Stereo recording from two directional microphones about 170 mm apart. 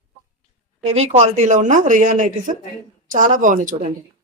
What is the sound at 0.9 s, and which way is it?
Speech, 40° right (ahead or behind).